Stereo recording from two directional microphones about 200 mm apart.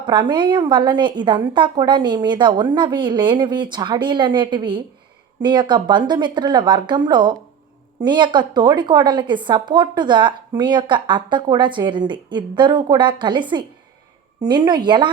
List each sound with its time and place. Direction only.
0.0 s speech: 25° right (ahead or behind)